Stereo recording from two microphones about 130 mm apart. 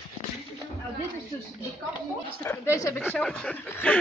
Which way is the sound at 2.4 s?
20° left (ahead or behind).